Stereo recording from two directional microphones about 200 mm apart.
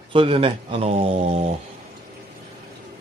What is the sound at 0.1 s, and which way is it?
Speech, 25° right (ahead or behind).